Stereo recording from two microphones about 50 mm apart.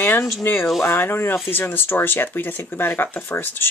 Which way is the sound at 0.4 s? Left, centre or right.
Left.